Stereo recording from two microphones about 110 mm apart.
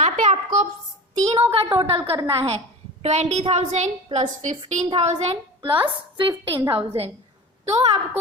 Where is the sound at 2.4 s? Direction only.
70° right (ahead or behind).